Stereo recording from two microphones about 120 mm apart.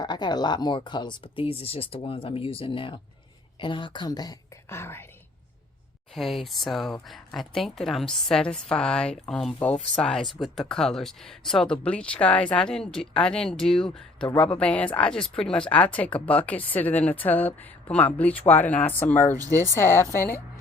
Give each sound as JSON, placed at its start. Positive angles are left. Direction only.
{"t": 0.0, "sound": "speech", "side_deg": 35}
{"t": 4.7, "sound": "a woman's voice", "side_deg": 20}
{"t": 6.1, "sound": "a woman's voice", "side_deg": 0}